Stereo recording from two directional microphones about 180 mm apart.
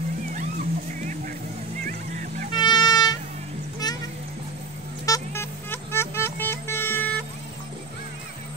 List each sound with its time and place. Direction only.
2.5 s music: 25° left (ahead or behind)
5.0 s music: 15° left (ahead or behind)